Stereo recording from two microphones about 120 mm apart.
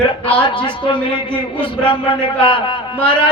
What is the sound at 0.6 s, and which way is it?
Speech, 45° left (ahead or behind).